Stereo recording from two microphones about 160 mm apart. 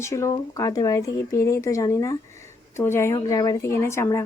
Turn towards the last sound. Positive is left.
turn(degrees=15)  # may be behind; listen again after turning